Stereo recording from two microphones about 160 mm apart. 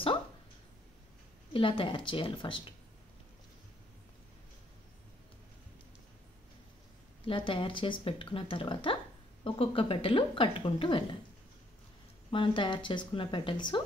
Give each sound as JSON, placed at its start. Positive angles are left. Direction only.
{"t": 1.5, "sound": "a woman's voice", "side_deg": 35}
{"t": 7.2, "sound": "a woman's voice", "side_deg": 35}
{"t": 12.3, "sound": "a woman's voice", "side_deg": 30}